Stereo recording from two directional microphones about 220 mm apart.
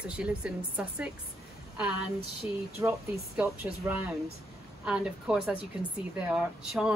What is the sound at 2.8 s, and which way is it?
Speech, 15° right (ahead or behind).